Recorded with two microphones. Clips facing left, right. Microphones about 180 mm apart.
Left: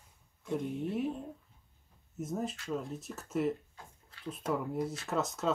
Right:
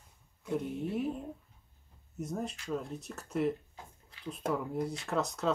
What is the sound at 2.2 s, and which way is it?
Speech, centre (ahead or behind).